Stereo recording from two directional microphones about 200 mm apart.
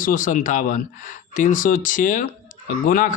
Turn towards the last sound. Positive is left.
turn(degrees=40)  # may be behind; listen again after turning